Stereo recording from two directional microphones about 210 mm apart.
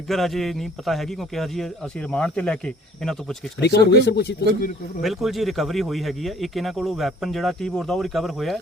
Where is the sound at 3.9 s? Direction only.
50° left (ahead or behind).